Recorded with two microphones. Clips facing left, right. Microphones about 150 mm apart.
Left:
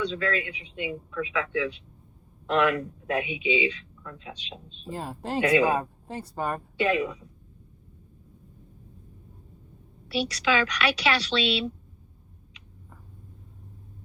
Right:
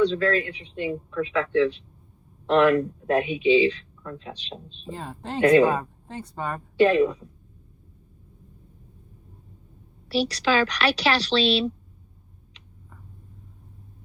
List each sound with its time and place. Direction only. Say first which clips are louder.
0.0 s speech: right 7 dB; 35° right (ahead or behind)
4.9 s a woman's voice: left 2 dB; 5° left (ahead or behind)
6.7 s speech: right 8 dB; 35° right (ahead or behind)
10.1 s speech: right 3 dB; 35° right (ahead or behind)